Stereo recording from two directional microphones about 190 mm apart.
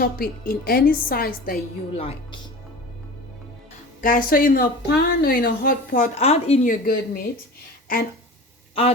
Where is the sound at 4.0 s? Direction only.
45° left (ahead or behind).